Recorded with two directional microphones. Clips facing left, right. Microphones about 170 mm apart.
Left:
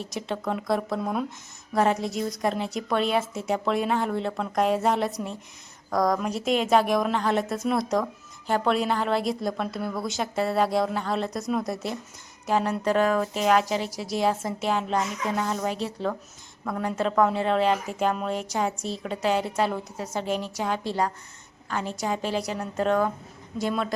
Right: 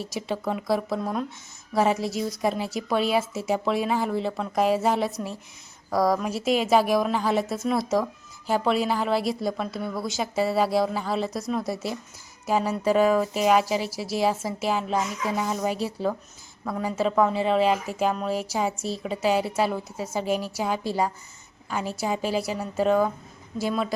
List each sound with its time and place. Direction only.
0.0 s speech: 5° right (ahead or behind)